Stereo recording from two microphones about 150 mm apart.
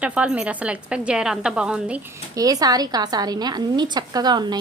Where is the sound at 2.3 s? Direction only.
25° right (ahead or behind).